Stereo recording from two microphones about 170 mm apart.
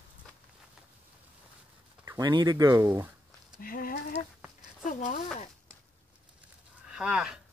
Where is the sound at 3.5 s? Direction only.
55° left (ahead or behind).